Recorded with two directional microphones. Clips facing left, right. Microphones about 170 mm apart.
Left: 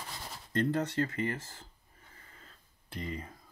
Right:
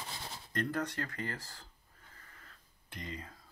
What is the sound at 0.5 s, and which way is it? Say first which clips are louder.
Speech: left 6 dB; 25° left (ahead or behind).